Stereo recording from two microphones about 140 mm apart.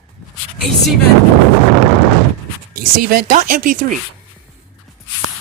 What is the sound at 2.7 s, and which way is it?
Speech, 90° right.